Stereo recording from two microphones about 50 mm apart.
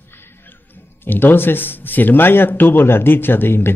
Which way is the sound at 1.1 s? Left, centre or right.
Left.